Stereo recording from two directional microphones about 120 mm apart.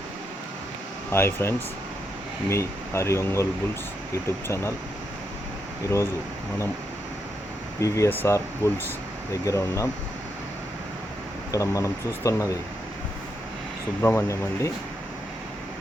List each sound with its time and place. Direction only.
1.1 s speech: 20° left (ahead or behind)
4.4 s speech: 25° left (ahead or behind)
7.8 s speech: 25° left (ahead or behind)
11.5 s speech: 25° left (ahead or behind)
14.0 s speech: 20° left (ahead or behind)